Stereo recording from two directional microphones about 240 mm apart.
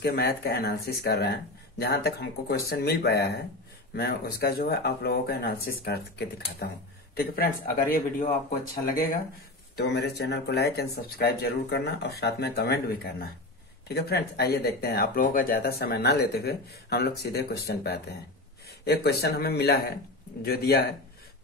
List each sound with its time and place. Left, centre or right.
0.0 s speech: left